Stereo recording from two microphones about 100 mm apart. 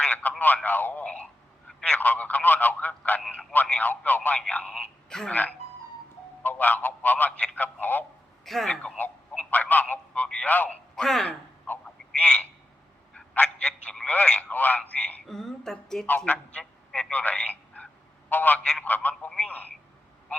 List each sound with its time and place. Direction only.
0.0 s speech: 15° left (ahead or behind)
6.4 s speech: 20° left (ahead or behind)
8.4 s speech: 5° left (ahead or behind)
10.5 s speech: 20° left (ahead or behind)
10.9 s telephone: 5° left (ahead or behind)
13.1 s speech: 10° left (ahead or behind)
16.0 s speech: 15° left (ahead or behind)